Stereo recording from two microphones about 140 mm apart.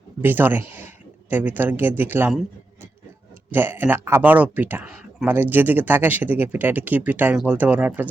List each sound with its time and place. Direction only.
0.2 s speech: 15° right (ahead or behind)
3.5 s speech: 15° right (ahead or behind)